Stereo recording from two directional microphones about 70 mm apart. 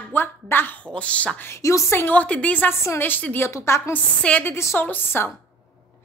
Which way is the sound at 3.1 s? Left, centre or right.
Left.